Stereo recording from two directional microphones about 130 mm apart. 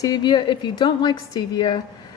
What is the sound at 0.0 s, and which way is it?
A woman's voice, 35° left (ahead or behind).